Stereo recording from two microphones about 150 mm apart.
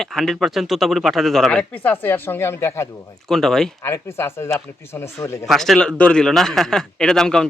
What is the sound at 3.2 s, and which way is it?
Speech, 5° left (ahead or behind).